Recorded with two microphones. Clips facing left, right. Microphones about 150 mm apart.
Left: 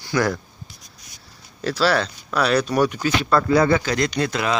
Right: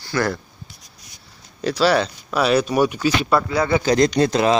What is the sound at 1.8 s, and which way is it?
Speech, centre (ahead or behind).